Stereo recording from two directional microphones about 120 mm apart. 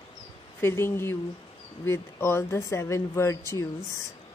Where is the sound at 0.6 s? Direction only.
20° left (ahead or behind).